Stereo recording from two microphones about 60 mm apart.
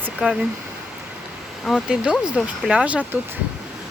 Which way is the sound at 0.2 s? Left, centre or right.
Centre.